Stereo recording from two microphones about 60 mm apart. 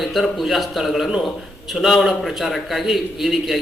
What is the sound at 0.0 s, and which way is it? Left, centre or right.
A man's voice, centre.